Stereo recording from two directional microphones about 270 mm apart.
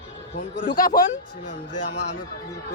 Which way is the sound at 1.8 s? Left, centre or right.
Left.